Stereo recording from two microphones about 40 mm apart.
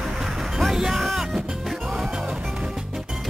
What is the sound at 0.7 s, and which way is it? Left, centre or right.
Music, centre.